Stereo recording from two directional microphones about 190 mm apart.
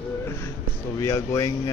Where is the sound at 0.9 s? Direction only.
15° left (ahead or behind).